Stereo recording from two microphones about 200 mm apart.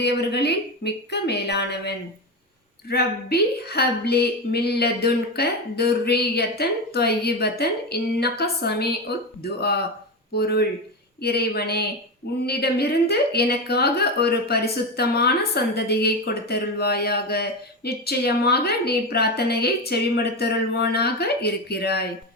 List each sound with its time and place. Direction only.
0.0 s a woman's voice: 55° left (ahead or behind)